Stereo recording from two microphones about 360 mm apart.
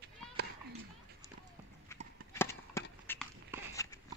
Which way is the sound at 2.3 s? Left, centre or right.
Centre.